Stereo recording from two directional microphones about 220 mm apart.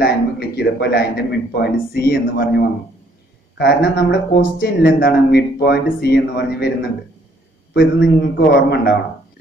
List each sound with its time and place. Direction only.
0.0 s speech: 45° left (ahead or behind)
7.7 s speech: 45° left (ahead or behind)